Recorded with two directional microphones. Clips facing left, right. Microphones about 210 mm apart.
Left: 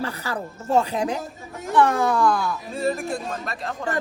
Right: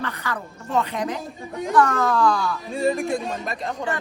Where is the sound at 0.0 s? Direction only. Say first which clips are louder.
Left 1 dB; 30° left (ahead or behind).